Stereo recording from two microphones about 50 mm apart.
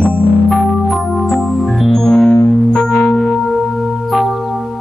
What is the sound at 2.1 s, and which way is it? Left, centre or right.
Music, centre.